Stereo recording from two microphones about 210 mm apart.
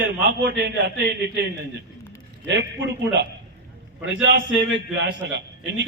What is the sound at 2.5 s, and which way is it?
Speech, 60° right (ahead or behind).